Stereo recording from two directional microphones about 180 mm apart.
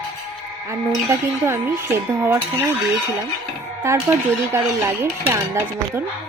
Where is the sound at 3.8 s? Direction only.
15° right (ahead or behind).